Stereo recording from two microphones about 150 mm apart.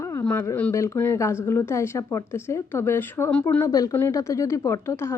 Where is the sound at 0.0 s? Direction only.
20° left (ahead or behind).